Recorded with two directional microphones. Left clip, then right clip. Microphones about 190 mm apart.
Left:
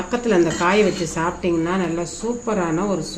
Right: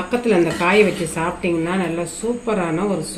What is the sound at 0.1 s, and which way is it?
A woman's voice, 5° right (ahead or behind).